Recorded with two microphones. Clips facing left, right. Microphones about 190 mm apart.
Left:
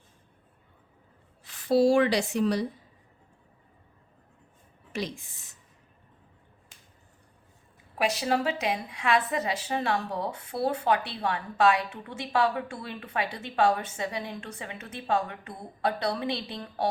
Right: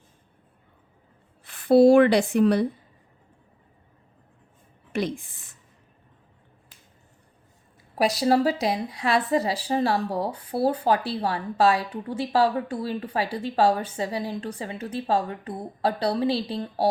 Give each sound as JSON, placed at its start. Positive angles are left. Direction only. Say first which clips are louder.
{"t": 1.5, "sound": "a woman's voice", "louder": "right 7 dB", "side_deg": -55}
{"t": 4.9, "sound": "a woman's voice", "louder": "right 6 dB", "side_deg": -55}
{"t": 7.9, "sound": "a woman's voice", "louder": "right 6 dB", "side_deg": -35}